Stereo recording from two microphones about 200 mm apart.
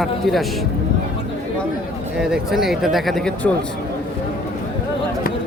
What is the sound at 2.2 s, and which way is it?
Speech, centre (ahead or behind).